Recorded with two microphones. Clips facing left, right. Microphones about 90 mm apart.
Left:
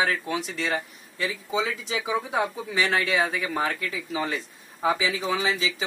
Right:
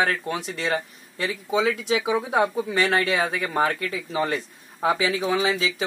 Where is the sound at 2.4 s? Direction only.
45° right (ahead or behind).